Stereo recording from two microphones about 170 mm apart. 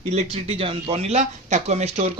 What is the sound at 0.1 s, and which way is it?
Speech, 40° right (ahead or behind).